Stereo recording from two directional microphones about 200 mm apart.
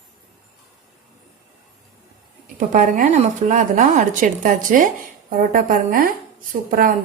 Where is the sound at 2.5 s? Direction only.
40° right (ahead or behind).